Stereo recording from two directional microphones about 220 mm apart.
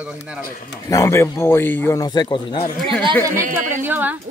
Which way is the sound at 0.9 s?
15° left (ahead or behind).